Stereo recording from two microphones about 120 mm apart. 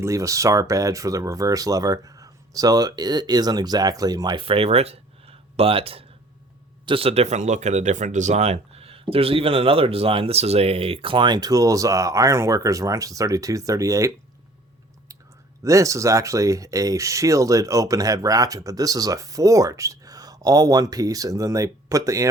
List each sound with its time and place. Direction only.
0.0 s speech: 25° right (ahead or behind)
4.4 s speech: 55° right (ahead or behind); by 14.1 s 25° right (ahead or behind)
15.6 s speech: 25° right (ahead or behind)